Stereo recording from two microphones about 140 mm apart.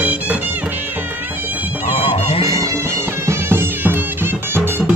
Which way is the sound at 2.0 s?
40° left (ahead or behind).